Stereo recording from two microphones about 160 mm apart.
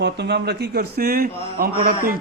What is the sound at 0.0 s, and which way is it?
A man's voice, 90° right.